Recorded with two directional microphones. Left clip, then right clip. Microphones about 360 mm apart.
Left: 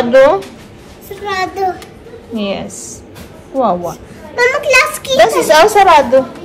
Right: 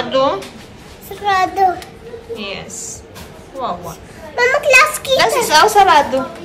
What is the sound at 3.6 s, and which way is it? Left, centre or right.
A child's voice, centre.